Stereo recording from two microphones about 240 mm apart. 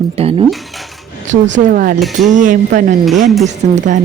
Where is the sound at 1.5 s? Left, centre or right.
Right.